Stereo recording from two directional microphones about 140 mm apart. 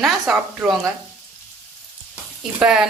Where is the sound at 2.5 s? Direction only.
5° right (ahead or behind).